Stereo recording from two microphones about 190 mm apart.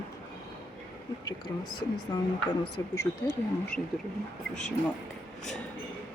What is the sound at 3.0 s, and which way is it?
Speech, 15° left (ahead or behind).